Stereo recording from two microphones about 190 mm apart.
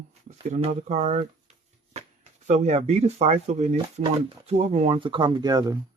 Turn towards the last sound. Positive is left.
turn(degrees=-20)  # may be behind; listen again after turning